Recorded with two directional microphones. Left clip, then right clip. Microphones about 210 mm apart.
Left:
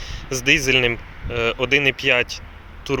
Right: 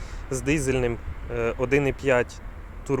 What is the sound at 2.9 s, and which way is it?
Speech, 5° left (ahead or behind).